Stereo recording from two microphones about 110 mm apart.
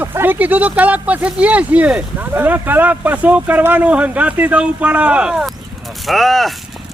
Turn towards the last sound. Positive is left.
turn(degrees=0)  # may be behind; listen again after turning